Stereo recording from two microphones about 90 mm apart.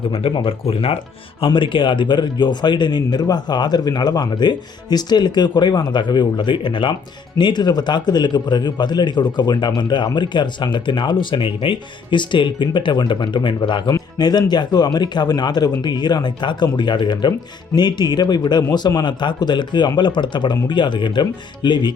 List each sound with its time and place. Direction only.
0.1 s speech: 90° left
1.5 s speech: 65° left (ahead or behind)
14.2 s speech: 50° left (ahead or behind)